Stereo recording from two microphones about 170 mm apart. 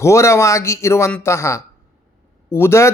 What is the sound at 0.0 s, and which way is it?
Speech, 15° left (ahead or behind).